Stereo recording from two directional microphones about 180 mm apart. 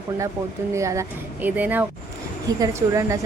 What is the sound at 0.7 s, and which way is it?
Speech, 15° right (ahead or behind).